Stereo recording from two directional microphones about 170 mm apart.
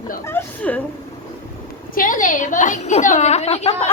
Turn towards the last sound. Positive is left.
turn(degrees=35)  # may be behind; listen again after turning